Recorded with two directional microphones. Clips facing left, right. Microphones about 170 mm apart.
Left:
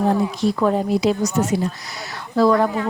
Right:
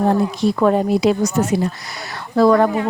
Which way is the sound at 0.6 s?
60° right (ahead or behind).